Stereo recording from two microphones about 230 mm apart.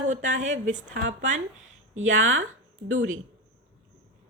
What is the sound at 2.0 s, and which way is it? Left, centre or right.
Speech, right.